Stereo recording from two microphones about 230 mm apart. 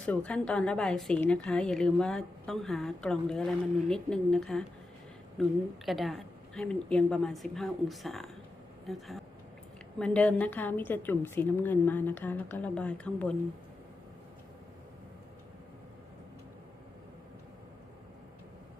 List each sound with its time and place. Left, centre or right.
0.0 s a woman's voice: centre